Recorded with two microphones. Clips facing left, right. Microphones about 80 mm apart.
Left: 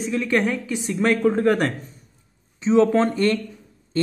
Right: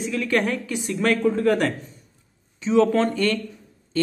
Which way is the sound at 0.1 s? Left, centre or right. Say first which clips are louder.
Left 2 dB; centre.